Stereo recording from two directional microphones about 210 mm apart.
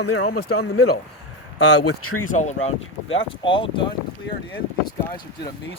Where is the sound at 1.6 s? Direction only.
90° left.